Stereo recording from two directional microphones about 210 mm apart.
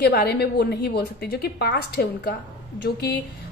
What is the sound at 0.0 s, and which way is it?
A woman's voice, 50° left (ahead or behind).